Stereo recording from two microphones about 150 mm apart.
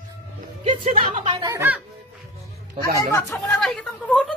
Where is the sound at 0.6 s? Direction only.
55° right (ahead or behind).